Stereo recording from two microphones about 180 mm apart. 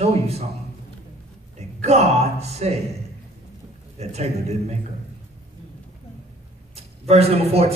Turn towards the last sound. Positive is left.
turn(degrees=-35)  # may be behind; listen again after turning